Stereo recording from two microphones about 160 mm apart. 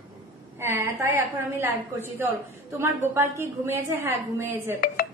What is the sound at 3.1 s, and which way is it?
Speech, 15° right (ahead or behind).